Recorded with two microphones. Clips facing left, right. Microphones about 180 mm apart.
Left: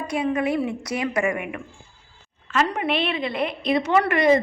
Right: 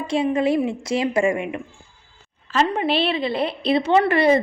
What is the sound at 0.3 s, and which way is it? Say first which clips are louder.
A woman's voice: right 3 dB; 25° right (ahead or behind).